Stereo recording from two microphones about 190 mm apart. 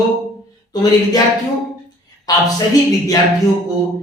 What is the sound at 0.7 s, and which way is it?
Speech, 20° left (ahead or behind).